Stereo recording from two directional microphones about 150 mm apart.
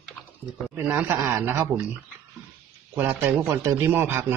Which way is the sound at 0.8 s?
15° right (ahead or behind).